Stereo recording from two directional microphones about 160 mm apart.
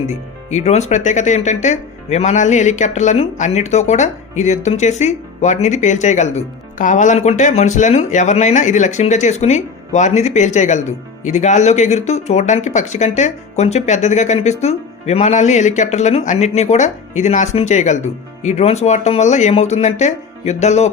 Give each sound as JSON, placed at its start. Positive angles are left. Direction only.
{"t": 0.5, "sound": "speech", "side_deg": 45}